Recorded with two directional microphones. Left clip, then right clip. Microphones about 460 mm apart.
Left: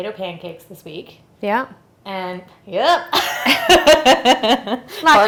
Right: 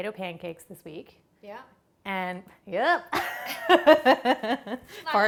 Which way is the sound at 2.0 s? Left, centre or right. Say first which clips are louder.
Left 5 dB; right.